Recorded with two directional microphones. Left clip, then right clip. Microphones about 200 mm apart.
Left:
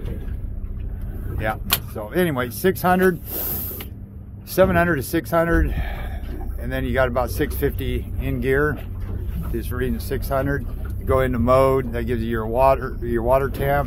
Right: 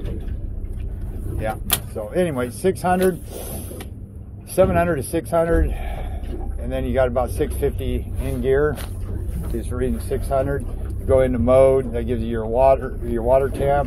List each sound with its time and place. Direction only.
1.4 s speech: 35° left (ahead or behind)
9.6 s speech: 30° left (ahead or behind)